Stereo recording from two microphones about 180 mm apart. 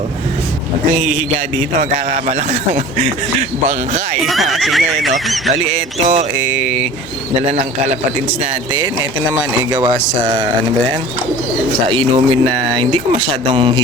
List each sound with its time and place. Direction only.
1.8 s speech: 40° right (ahead or behind)
4.3 s speech: centre (ahead or behind)
5.7 s speech: 40° right (ahead or behind)
9.7 s speech: 25° right (ahead or behind)
11.9 s speech: 30° right (ahead or behind)